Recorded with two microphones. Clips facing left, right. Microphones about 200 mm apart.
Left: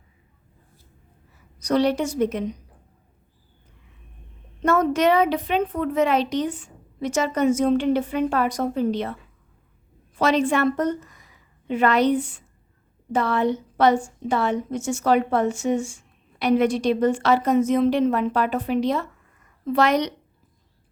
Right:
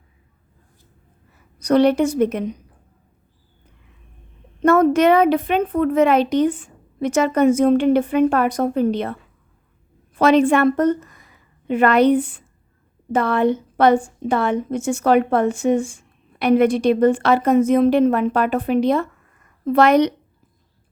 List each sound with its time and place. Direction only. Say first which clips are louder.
1.5 s a woman's voice: right 6 dB; 55° right (ahead or behind)
4.6 s a woman's voice: right 5 dB; 55° right (ahead or behind)
10.2 s a woman's voice: right 6 dB; 55° right (ahead or behind)